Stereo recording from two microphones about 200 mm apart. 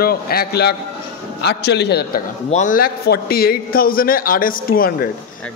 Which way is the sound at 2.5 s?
40° left (ahead or behind).